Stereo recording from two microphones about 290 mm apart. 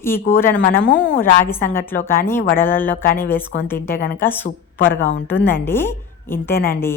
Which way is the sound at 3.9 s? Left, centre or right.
Left.